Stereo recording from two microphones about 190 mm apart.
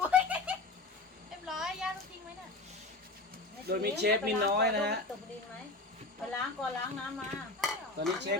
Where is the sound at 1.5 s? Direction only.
5° right (ahead or behind).